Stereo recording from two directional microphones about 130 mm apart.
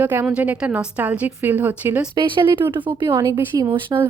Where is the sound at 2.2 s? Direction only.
40° right (ahead or behind).